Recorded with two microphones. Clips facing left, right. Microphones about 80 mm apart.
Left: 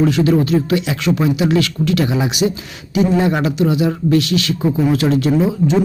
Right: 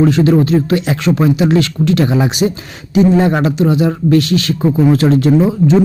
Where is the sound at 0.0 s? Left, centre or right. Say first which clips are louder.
Right 3 dB; right.